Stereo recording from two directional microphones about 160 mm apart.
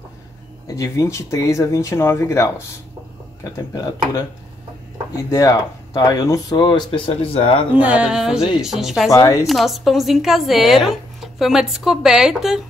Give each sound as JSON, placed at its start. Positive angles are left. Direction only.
{"t": 0.7, "sound": "speech", "side_deg": 20}
{"t": 3.5, "sound": "speech", "side_deg": 20}
{"t": 7.7, "sound": "speech", "side_deg": -10}
{"t": 9.1, "sound": "speech", "side_deg": 20}
{"t": 9.5, "sound": "speech", "side_deg": 0}